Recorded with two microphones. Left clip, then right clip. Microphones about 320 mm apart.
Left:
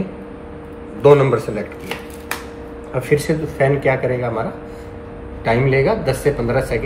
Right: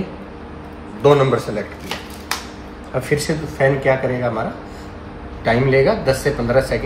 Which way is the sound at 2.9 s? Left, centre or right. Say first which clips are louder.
Left 2 dB; centre.